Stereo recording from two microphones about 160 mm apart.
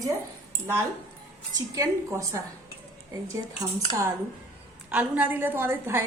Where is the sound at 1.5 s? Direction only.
20° right (ahead or behind).